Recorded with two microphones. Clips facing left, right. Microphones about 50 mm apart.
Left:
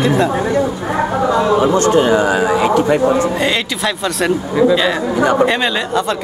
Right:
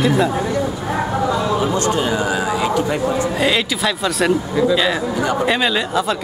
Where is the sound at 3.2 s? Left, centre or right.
Centre.